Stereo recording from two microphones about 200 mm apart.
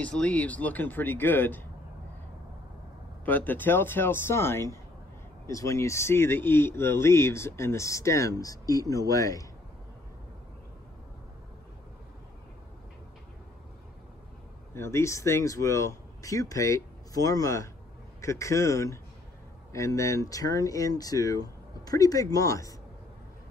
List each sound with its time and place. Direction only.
0.0 s speech: 5° left (ahead or behind)
3.3 s speech: 10° left (ahead or behind)
14.7 s speech: 15° left (ahead or behind)